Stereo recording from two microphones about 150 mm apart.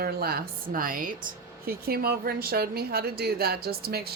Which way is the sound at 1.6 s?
85° right.